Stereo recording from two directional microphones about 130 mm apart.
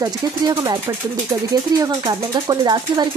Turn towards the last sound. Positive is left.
turn(degrees=-30)  # may be behind; listen again after turning